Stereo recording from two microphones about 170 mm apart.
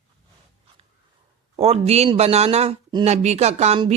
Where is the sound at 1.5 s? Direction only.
35° right (ahead or behind).